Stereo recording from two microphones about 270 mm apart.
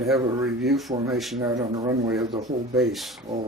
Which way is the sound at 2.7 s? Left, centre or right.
Centre.